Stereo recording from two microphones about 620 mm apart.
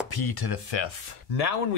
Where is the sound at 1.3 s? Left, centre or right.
Left.